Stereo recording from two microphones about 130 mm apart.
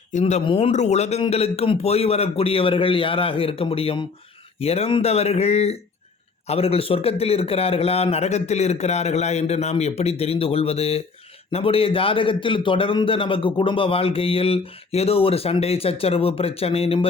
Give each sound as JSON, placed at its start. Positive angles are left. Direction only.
{"t": 0.1, "sound": "speech", "side_deg": 65}
{"t": 0.4, "sound": "a man's voice", "side_deg": 50}